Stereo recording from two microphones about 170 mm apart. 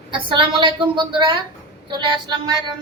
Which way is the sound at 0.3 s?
30° right (ahead or behind).